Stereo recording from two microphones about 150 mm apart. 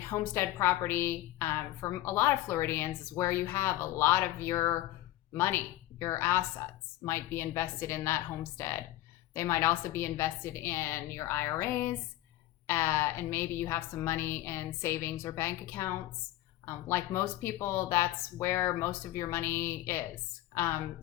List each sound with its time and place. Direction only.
0.0 s a woman's voice: 15° left (ahead or behind)